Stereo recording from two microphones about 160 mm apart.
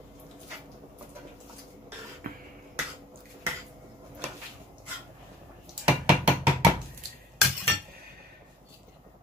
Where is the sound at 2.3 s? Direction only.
60° right (ahead or behind).